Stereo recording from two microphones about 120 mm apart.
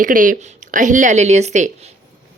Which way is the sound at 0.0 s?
90° right.